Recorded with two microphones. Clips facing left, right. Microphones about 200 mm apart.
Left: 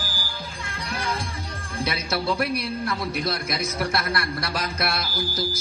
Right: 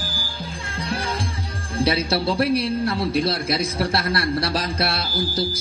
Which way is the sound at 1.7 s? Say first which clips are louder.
Right 6 dB; 30° right (ahead or behind).